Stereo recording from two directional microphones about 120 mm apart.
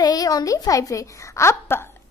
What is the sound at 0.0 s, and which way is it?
A woman's voice, 30° left (ahead or behind).